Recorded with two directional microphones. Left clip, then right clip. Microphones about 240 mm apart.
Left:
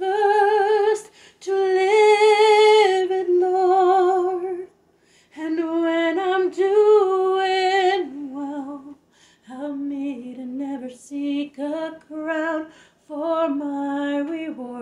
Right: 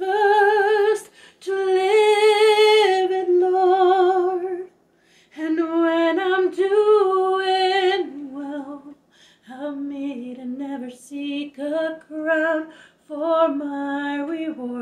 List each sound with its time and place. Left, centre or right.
0.0 s a sound: centre
1.4 s singing: left
5.3 s female singing: centre
9.5 s female singing: centre
10.6 s music: centre
13.2 s female singing: left